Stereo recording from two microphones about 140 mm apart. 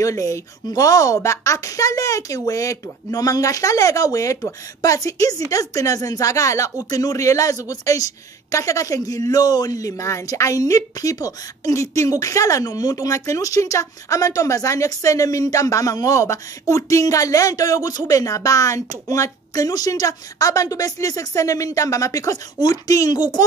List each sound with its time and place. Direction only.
0.0 s speech: 20° left (ahead or behind)